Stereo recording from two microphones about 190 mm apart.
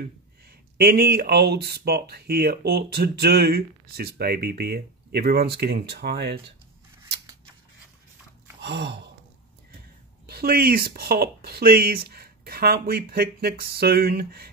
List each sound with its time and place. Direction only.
0.7 s speech: 55° right (ahead or behind)
8.5 s gasp: 65° right (ahead or behind)
10.2 s speech: 50° right (ahead or behind)